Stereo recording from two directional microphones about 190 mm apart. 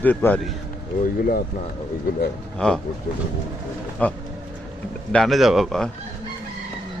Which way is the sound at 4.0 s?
5° left (ahead or behind).